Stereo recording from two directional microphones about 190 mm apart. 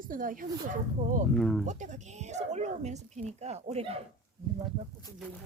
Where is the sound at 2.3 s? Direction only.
35° right (ahead or behind).